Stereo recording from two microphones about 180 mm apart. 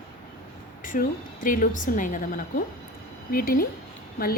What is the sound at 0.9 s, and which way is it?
A woman's voice, 50° left (ahead or behind).